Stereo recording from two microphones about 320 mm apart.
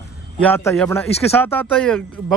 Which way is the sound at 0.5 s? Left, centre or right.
Centre.